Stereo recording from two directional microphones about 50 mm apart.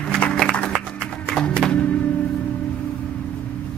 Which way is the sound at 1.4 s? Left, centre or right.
Centre.